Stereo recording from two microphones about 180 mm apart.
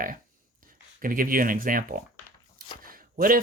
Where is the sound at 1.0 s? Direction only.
50° right (ahead or behind).